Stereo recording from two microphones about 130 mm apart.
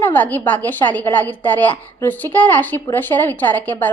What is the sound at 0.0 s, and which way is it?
A woman's voice, 15° left (ahead or behind).